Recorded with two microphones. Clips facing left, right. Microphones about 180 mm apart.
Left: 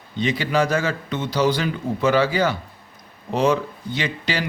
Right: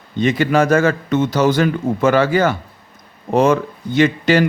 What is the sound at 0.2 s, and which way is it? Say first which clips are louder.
Speech: right 6 dB; 50° right (ahead or behind).